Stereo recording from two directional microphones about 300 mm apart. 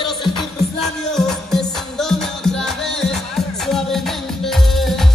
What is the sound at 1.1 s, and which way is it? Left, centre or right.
Music, centre.